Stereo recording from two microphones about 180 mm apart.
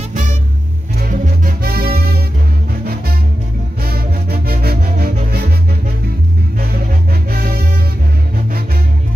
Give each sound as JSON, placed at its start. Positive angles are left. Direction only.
{"t": 0.9, "sound": "music", "side_deg": -45}
{"t": 3.8, "sound": "music", "side_deg": -55}
{"t": 7.2, "sound": "music", "side_deg": -55}